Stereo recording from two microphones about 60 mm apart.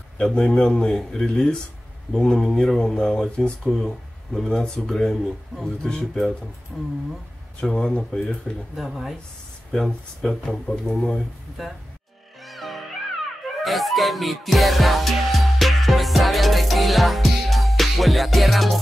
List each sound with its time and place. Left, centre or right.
0.2 s speech: centre
8.7 s speech: centre
11.6 s speech: centre
12.4 s music: centre